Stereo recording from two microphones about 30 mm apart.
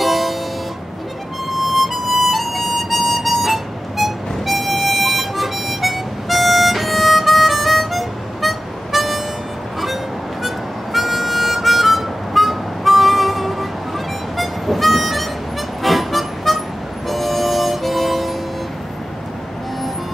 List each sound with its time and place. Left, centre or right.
0.0 s music: centre
1.5 s harmonica: centre
10.4 s harmonica: centre
15.8 s music: centre
17.1 s harmonica: centre